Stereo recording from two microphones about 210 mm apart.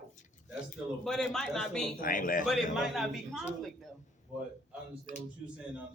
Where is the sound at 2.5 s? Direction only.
Centre (ahead or behind).